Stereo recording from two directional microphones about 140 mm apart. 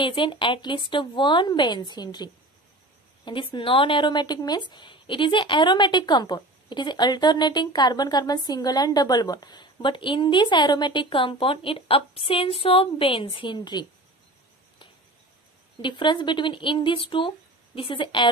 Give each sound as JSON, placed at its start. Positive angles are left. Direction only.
{"t": 0.0, "sound": "a woman's voice", "side_deg": 35}
{"t": 15.8, "sound": "a woman's voice", "side_deg": 35}